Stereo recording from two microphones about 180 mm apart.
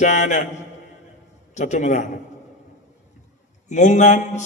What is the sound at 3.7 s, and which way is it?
Speech, 40° left (ahead or behind).